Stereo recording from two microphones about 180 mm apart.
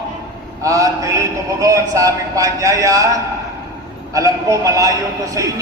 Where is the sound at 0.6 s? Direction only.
15° right (ahead or behind).